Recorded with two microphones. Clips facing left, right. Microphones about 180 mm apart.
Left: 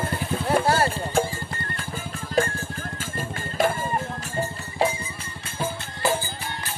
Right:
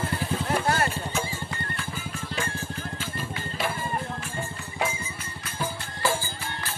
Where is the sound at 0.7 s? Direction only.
30° left (ahead or behind).